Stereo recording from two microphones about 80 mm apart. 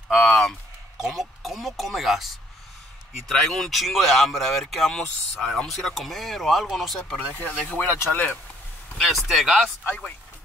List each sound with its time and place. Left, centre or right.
0.1 s speech: centre
7.3 s speech: left
8.9 s speech: centre
9.8 s speech: centre